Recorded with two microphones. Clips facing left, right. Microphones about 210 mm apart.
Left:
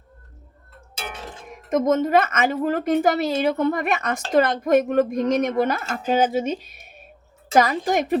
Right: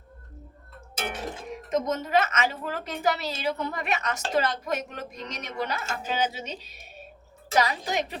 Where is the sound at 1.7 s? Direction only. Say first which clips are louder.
Left 7 dB; 50° left (ahead or behind).